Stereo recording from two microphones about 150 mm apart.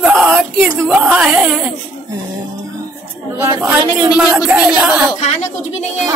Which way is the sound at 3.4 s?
20° right (ahead or behind).